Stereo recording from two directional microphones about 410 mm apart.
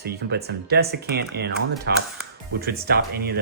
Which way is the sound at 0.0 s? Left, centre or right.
Right.